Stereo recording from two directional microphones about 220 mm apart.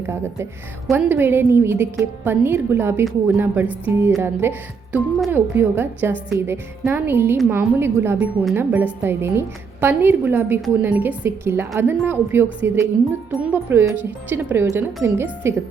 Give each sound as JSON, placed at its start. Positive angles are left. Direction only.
{"t": 0.1, "sound": "a woman's voice", "side_deg": -10}